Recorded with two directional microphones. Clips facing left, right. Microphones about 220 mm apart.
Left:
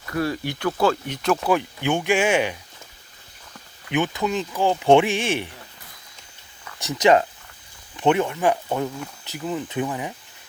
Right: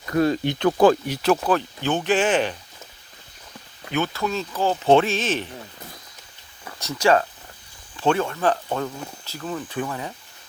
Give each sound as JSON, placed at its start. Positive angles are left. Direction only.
{"t": 0.1, "sound": "speech", "side_deg": -20}
{"t": 1.5, "sound": "speech", "side_deg": 15}
{"t": 3.9, "sound": "speech", "side_deg": 15}
{"t": 6.7, "sound": "speech", "side_deg": 15}